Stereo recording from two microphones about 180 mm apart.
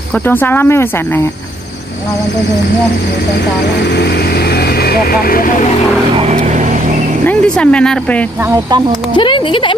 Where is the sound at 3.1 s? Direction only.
70° left (ahead or behind); by 5.7 s 50° left (ahead or behind).